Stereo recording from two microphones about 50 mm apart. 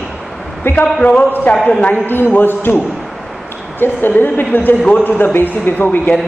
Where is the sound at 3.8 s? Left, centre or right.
Left.